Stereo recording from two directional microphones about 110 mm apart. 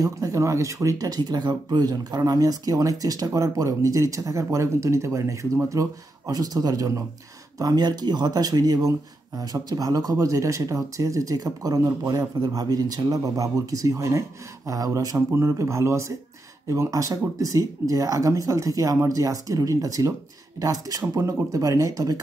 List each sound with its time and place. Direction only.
0.0 s speech: 30° right (ahead or behind)